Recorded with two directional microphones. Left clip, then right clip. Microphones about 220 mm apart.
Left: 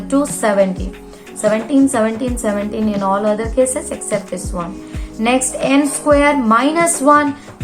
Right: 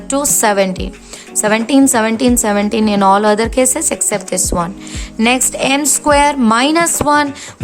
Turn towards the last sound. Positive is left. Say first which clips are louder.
# even
turn(degrees=-45)  # may be behind; listen again after turning